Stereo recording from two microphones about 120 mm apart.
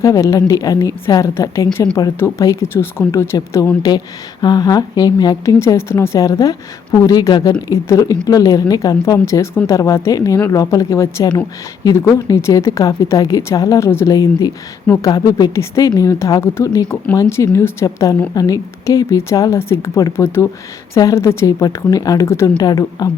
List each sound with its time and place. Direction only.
0.0 s a woman's voice: 25° left (ahead or behind)